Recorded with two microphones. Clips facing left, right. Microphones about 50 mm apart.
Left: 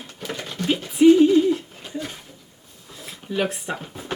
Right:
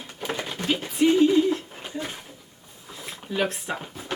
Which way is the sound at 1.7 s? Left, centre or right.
Right.